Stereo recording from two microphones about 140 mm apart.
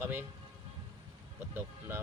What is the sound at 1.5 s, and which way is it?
Speech, 15° right (ahead or behind).